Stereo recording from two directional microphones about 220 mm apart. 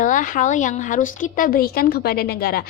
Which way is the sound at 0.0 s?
35° left (ahead or behind).